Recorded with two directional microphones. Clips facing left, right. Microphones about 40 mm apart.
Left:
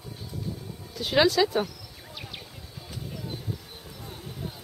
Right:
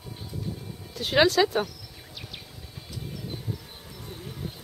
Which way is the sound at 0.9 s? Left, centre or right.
Centre.